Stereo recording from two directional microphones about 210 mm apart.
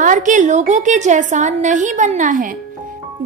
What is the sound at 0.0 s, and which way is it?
Speech, 35° right (ahead or behind).